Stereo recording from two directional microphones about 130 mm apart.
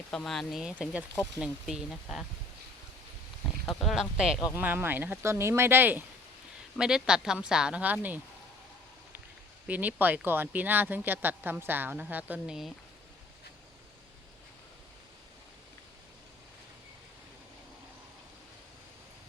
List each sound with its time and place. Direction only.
0.1 s speech: 5° left (ahead or behind)
3.7 s speech: centre (ahead or behind)
4.5 s speech: 15° right (ahead or behind)
6.7 s speech: 5° right (ahead or behind)
9.6 s speech: 10° right (ahead or behind)